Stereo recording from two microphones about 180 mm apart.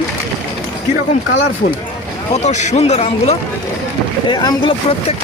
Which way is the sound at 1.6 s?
55° left (ahead or behind).